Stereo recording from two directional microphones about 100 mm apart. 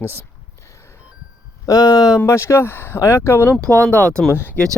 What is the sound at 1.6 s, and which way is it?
Speech, 40° left (ahead or behind).